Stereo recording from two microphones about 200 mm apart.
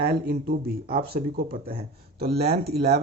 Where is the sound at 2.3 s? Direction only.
30° right (ahead or behind).